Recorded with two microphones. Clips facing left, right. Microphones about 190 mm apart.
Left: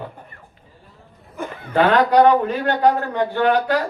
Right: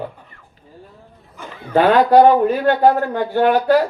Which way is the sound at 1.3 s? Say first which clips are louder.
Left 6 dB; 55° left (ahead or behind).